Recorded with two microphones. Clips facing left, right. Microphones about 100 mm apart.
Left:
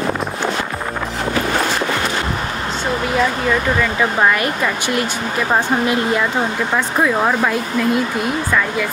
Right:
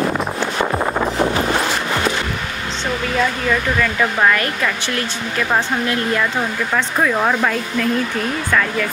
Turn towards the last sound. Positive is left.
turn(degrees=10)  # may be behind; listen again after turning